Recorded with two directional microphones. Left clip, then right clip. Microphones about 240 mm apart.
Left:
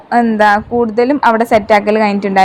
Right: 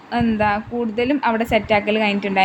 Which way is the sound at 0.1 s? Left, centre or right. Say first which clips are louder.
Left 10 dB; left.